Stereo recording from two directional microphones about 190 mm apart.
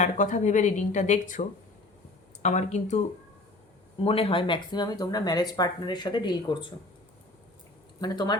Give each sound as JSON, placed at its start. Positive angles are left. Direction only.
{"t": 0.0, "sound": "speech", "side_deg": 40}
{"t": 4.0, "sound": "speech", "side_deg": 30}
{"t": 8.0, "sound": "speech", "side_deg": 20}